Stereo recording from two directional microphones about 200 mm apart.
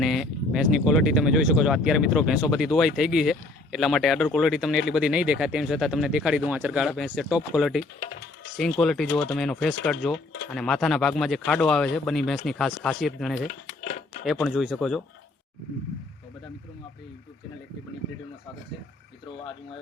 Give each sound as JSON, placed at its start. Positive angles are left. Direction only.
{"t": 0.0, "sound": "speech", "side_deg": 0}
{"t": 7.9, "sound": "speech", "side_deg": 30}
{"t": 8.5, "sound": "speech", "side_deg": 0}
{"t": 13.5, "sound": "dishes", "side_deg": 35}
{"t": 14.4, "sound": "speech", "side_deg": 0}